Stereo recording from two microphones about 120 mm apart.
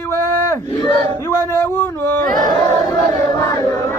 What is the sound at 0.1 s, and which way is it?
Battle cry, 25° left (ahead or behind).